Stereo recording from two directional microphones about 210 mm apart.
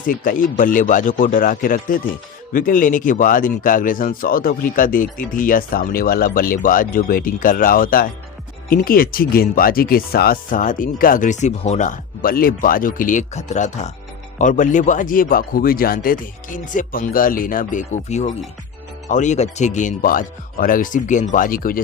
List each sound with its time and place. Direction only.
0.0 s speech: 40° left (ahead or behind)